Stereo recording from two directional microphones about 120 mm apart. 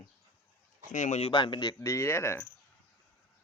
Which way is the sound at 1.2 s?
40° left (ahead or behind).